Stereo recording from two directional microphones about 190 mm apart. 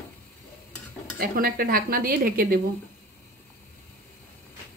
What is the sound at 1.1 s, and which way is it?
Speech, 50° right (ahead or behind).